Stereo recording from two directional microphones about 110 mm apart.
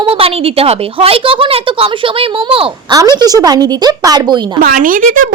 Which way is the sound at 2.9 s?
40° right (ahead or behind).